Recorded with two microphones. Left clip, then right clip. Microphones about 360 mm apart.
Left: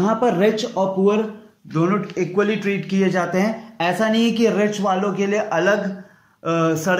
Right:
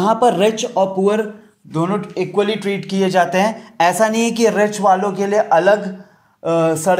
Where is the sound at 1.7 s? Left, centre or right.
Right.